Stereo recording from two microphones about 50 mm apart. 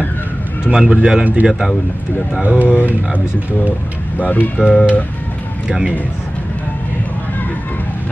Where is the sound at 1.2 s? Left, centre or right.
Right.